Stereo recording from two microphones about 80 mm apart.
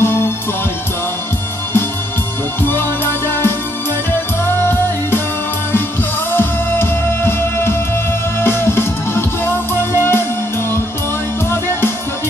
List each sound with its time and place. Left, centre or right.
0.0 s music: left
2.6 s music: left
6.3 s music: left